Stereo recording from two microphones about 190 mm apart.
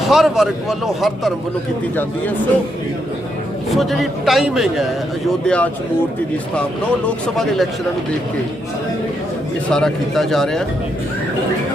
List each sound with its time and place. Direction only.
0.0 s a man's voice: centre (ahead or behind)
3.7 s a man's voice: centre (ahead or behind)
7.3 s a man's voice: centre (ahead or behind)
9.6 s a man's voice: 5° left (ahead or behind)